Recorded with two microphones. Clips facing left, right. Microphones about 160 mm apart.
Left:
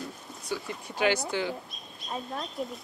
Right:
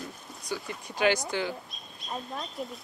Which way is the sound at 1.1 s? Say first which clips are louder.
Right 1 dB; 15° left (ahead or behind).